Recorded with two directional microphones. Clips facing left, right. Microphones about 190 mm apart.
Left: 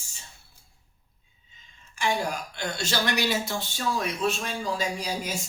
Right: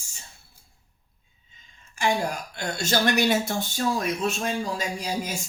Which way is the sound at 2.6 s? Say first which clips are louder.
Right 5 dB; 45° right (ahead or behind).